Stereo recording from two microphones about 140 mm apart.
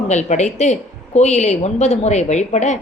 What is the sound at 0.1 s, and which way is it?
Speech, 55° left (ahead or behind).